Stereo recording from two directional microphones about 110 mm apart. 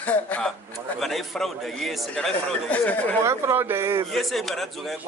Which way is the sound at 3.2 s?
25° right (ahead or behind).